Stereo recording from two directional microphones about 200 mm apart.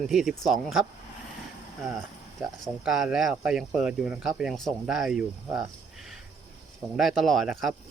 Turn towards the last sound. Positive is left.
turn(degrees=0)  # may be behind; listen again after turning